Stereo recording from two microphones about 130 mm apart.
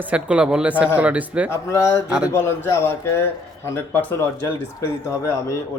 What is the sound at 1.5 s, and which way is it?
A man's voice, 20° left (ahead or behind).